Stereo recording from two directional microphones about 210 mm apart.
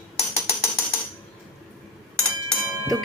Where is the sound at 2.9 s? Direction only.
Centre (ahead or behind).